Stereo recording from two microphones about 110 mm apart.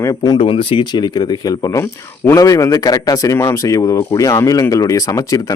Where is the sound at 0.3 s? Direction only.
55° left (ahead or behind).